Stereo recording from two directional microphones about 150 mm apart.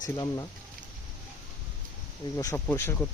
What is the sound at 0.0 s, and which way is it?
Speech, 25° left (ahead or behind).